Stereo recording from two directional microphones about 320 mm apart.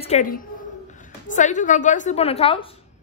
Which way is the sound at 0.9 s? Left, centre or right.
Left.